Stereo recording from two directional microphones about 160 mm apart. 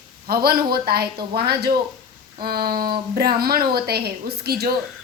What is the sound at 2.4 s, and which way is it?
A woman's voice, 70° right (ahead or behind).